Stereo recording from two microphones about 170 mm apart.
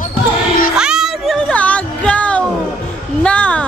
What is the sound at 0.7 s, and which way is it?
Music, 5° right (ahead or behind).